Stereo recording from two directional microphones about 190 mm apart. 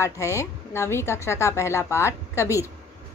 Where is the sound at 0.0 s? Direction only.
15° left (ahead or behind).